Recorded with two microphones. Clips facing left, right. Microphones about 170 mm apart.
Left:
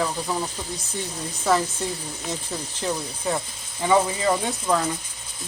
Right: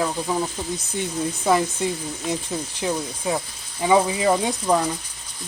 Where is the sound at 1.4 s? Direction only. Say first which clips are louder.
Right 1 dB; 10° right (ahead or behind).